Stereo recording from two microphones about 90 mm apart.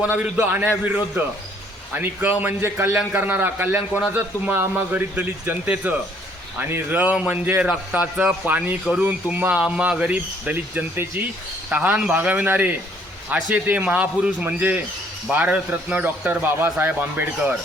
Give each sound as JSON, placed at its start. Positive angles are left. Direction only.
{"t": 0.2, "sound": "a man's voice", "side_deg": -20}
{"t": 9.6, "sound": "a man's voice", "side_deg": -10}